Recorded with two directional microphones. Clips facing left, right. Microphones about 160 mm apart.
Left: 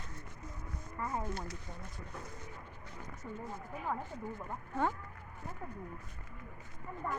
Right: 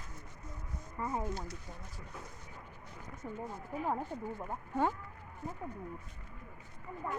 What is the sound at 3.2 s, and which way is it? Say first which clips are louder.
Speech: right 2 dB; 25° right (ahead or behind).